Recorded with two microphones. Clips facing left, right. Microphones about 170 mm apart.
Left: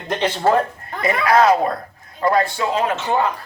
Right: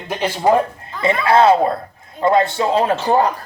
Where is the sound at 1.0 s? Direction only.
25° right (ahead or behind).